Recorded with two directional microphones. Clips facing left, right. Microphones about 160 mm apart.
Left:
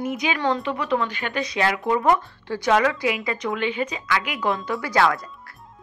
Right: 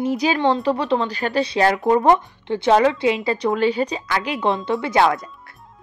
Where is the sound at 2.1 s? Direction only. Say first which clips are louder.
Right 4 dB; 25° right (ahead or behind).